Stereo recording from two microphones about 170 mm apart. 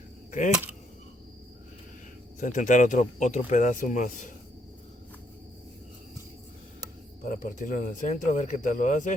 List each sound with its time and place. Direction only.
2.4 s speech: 45° left (ahead or behind)
7.2 s speech: 50° left (ahead or behind)